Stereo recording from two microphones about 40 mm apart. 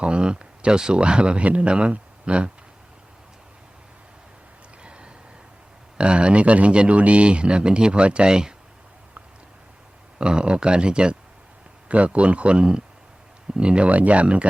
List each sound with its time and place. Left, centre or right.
0.0 s speech: right
4.8 s a sound: right
6.0 s speech: right
10.2 s speech: right